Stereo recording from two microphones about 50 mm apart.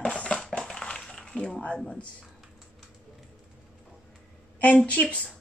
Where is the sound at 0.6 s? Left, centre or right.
Centre.